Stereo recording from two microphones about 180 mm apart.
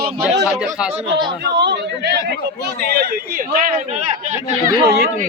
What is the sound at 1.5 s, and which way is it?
Speech, 75° right (ahead or behind).